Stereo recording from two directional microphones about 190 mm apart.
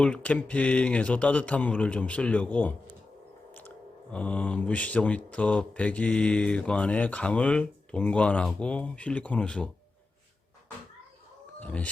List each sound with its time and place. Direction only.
0.0 s speech: 5° left (ahead or behind)
4.1 s speech: 5° left (ahead or behind)
11.6 s speech: 10° left (ahead or behind)